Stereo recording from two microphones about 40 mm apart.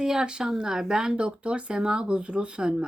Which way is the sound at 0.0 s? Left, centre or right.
Centre.